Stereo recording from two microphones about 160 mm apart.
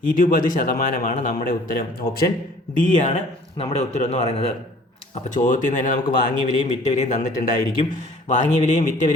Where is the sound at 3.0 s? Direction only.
35° left (ahead or behind).